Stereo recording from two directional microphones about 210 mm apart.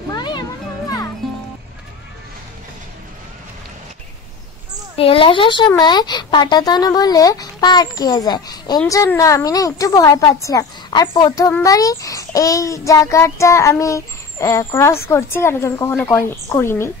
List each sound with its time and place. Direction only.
0.1 s music: 20° left (ahead or behind)
4.9 s speech: 25° left (ahead or behind)